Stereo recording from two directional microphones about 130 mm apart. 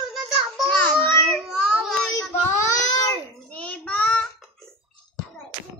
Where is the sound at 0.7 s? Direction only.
10° left (ahead or behind).